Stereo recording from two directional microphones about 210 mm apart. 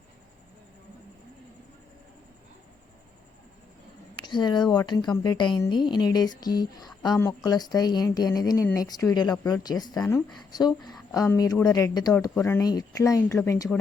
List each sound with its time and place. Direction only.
4.1 s speech: 20° left (ahead or behind)